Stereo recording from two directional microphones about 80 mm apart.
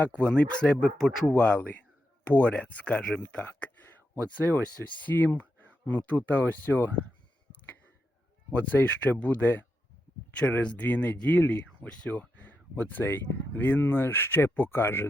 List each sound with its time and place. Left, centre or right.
0.0 s speech: centre
8.5 s speech: left